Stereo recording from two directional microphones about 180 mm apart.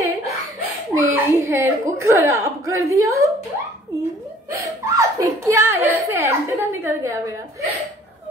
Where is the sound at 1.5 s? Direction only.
15° right (ahead or behind).